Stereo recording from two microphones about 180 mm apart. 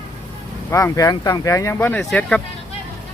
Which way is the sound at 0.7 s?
15° left (ahead or behind).